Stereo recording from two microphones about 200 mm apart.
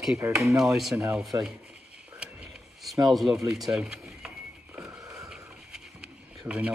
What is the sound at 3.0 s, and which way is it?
Speech, centre (ahead or behind).